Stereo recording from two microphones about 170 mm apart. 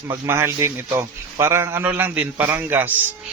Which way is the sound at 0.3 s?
15° right (ahead or behind).